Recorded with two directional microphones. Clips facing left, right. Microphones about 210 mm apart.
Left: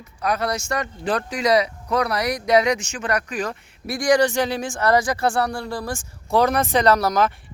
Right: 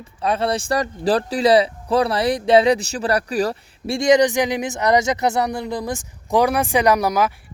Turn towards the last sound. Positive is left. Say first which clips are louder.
# right 1 dB
turn(degrees=-10)  # may be behind; listen again after turning